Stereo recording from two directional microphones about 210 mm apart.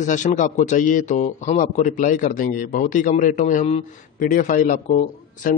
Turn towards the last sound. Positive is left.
turn(degrees=40)  # may be behind; listen again after turning